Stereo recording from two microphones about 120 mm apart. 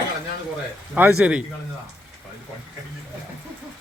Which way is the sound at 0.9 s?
10° right (ahead or behind).